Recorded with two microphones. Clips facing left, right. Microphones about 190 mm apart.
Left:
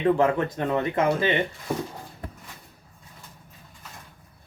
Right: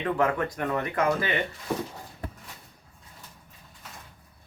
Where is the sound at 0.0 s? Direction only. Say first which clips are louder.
Left 5 dB; 25° left (ahead or behind).